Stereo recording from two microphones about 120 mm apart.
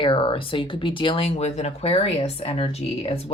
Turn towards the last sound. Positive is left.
turn(degrees=55)  # may be behind; listen again after turning